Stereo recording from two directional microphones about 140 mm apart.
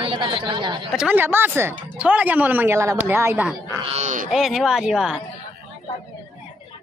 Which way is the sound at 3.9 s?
60° right (ahead or behind).